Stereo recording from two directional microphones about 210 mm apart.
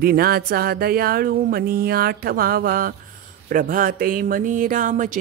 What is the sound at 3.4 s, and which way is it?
Speech, 40° right (ahead or behind).